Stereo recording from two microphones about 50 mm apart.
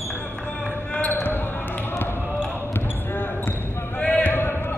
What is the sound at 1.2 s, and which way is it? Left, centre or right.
Basketball bounce, left.